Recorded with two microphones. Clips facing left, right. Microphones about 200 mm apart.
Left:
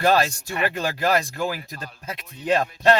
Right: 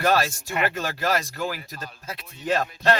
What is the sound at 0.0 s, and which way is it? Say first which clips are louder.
Speech: left 2 dB; 20° left (ahead or behind).